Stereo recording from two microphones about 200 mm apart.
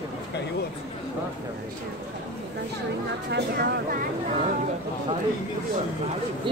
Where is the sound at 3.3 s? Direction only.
55° right (ahead or behind).